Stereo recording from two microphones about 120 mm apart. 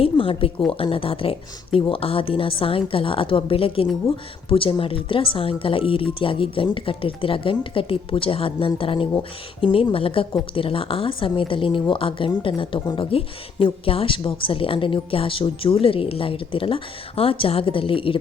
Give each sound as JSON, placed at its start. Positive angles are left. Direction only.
{"t": 0.0, "sound": "speech", "side_deg": 50}